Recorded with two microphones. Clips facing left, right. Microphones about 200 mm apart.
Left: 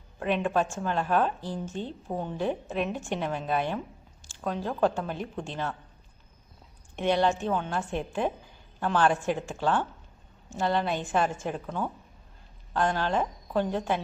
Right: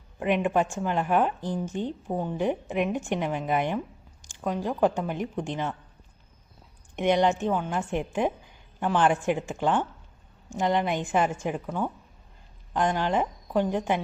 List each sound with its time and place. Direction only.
0.2 s a woman's voice: 15° right (ahead or behind)
6.9 s a woman's voice: 15° right (ahead or behind)